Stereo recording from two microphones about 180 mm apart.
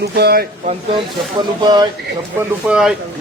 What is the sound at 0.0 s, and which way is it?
Speech, 60° right (ahead or behind).